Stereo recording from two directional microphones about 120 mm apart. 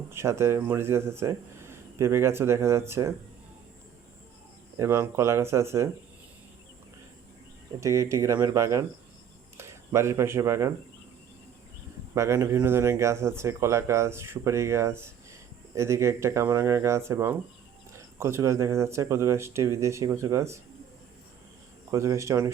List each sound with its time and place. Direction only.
0.1 s speech: 20° right (ahead or behind)
4.8 s speech: 25° right (ahead or behind)
7.8 s speech: 25° right (ahead or behind)
12.1 s speech: 25° right (ahead or behind)
21.9 s speech: 25° right (ahead or behind)